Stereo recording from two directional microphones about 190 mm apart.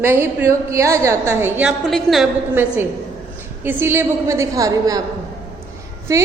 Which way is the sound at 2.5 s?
10° right (ahead or behind).